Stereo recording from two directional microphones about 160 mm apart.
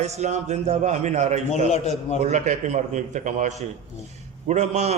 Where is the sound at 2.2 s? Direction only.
45° right (ahead or behind).